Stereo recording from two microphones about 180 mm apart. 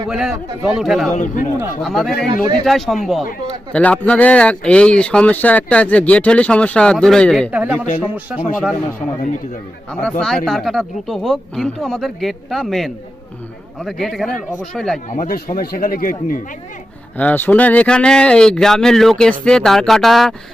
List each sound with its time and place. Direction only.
0.1 s speech: 5° right (ahead or behind)
1.1 s speech: 45° left (ahead or behind)
1.8 s speech: centre (ahead or behind)
9.9 s speech: 5° left (ahead or behind)
15.1 s speech: 45° left (ahead or behind)
17.2 s speech: 10° left (ahead or behind)